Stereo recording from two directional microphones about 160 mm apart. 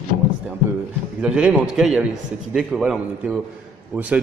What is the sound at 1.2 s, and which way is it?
A man's voice, 5° right (ahead or behind).